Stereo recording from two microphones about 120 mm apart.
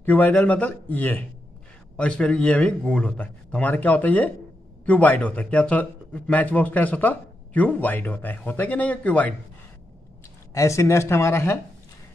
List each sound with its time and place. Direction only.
0.0 s speech: 15° left (ahead or behind)
10.5 s speech: 25° left (ahead or behind)